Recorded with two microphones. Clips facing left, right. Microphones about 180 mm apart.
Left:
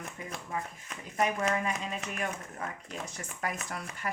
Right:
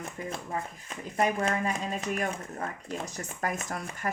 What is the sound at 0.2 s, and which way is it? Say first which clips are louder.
Speech: right 3 dB; 40° right (ahead or behind).